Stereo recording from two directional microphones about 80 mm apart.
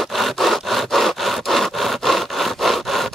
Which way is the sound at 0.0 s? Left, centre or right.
Centre.